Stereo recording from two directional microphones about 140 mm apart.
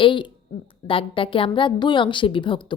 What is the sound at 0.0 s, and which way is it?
A woman's voice, 35° left (ahead or behind).